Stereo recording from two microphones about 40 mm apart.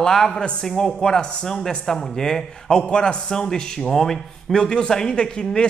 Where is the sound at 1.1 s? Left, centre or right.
Left.